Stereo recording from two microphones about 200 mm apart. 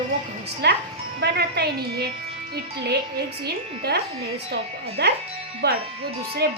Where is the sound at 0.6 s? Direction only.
55° right (ahead or behind).